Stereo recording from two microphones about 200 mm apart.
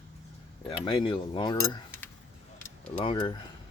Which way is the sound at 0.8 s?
25° left (ahead or behind).